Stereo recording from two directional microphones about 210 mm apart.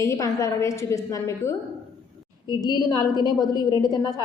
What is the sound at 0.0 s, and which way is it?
A woman's voice, 15° left (ahead or behind).